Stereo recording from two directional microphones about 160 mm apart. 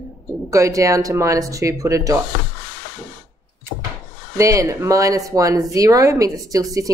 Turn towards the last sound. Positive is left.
turn(degrees=-20)  # may be behind; listen again after turning